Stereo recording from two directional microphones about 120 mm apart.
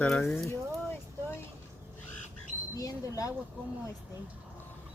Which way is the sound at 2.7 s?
30° left (ahead or behind).